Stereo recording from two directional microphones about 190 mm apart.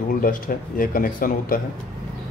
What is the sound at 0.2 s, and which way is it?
Speech, 45° left (ahead or behind).